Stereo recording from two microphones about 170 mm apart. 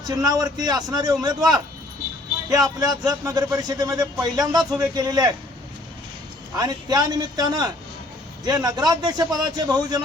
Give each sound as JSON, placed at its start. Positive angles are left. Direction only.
{"t": 0.0, "sound": "speech", "side_deg": -20}
{"t": 6.6, "sound": "speech", "side_deg": -25}